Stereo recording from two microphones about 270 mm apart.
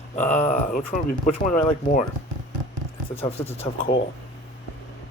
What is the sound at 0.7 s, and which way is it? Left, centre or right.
Speech, left.